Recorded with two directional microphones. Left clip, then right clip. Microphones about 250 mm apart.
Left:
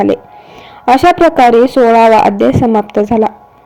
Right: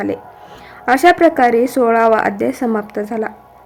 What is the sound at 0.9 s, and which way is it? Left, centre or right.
A woman's voice, centre.